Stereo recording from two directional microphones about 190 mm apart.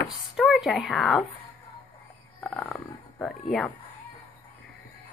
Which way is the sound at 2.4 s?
5° left (ahead or behind).